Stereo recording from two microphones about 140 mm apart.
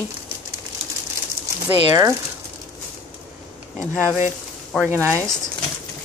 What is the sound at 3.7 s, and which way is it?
Speech, 20° right (ahead or behind).